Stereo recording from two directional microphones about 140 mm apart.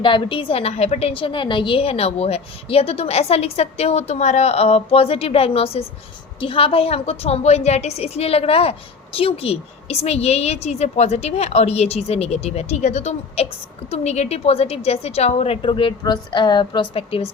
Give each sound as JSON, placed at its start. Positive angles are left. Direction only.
{"t": 0.0, "sound": "a woman's voice", "side_deg": 35}